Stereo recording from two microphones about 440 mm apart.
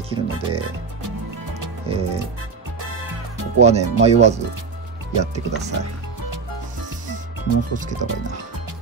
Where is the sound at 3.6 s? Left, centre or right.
Centre.